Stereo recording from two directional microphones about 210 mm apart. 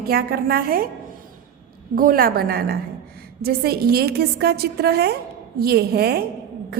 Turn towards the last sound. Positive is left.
turn(degrees=-50)  # may be behind; listen again after turning